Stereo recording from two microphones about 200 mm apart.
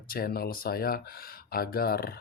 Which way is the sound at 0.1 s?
50° left (ahead or behind).